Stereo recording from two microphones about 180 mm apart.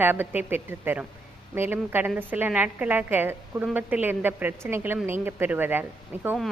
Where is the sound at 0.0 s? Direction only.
10° right (ahead or behind).